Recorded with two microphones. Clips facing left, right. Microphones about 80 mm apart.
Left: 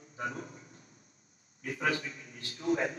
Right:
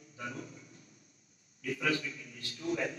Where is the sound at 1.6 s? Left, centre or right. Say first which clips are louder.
Left 1 dB; left.